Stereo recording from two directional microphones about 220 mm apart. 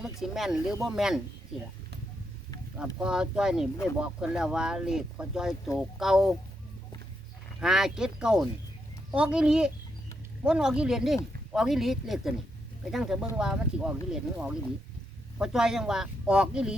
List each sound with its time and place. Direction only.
0.0 s speech: centre (ahead or behind)
2.7 s speech: 5° right (ahead or behind)
7.6 s speech: centre (ahead or behind)